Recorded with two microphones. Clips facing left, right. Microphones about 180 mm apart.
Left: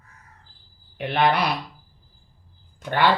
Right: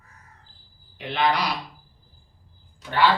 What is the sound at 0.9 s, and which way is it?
Speech, 55° left (ahead or behind).